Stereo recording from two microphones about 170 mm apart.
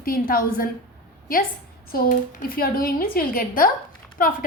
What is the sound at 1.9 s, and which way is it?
A woman's voice, 60° left (ahead or behind).